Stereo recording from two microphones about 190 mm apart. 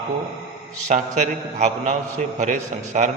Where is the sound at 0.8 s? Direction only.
40° right (ahead or behind).